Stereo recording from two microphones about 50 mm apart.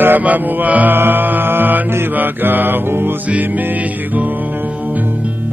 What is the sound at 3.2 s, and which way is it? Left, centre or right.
Mantra, right.